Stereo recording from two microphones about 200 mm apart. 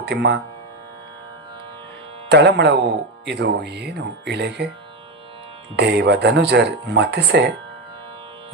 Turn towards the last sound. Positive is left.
turn(degrees=-60)  # may be behind; listen again after turning